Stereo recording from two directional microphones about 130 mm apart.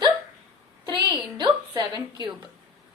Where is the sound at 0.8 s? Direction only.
35° right (ahead or behind).